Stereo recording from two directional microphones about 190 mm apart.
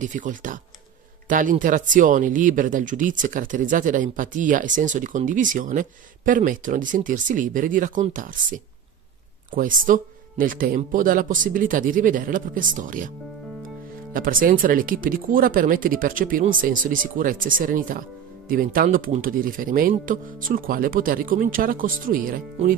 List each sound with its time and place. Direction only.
0.0 s speech: 40° right (ahead or behind)
14.1 s speech: 45° right (ahead or behind)